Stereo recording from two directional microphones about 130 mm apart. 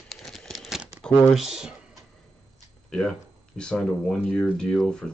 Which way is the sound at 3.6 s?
5° left (ahead or behind).